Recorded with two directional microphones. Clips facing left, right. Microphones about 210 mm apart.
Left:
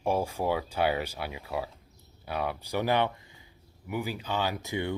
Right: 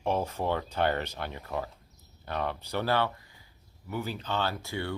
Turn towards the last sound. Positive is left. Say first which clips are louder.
# left 3 dB
turn(degrees=15)  # may be behind; listen again after turning